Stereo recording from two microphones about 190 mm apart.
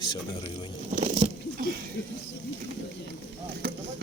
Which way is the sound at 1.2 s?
35° right (ahead or behind).